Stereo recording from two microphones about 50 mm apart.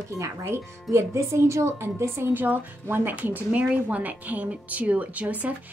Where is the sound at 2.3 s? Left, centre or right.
Right.